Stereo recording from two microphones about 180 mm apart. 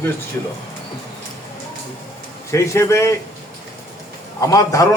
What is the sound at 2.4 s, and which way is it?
Speech, 15° left (ahead or behind).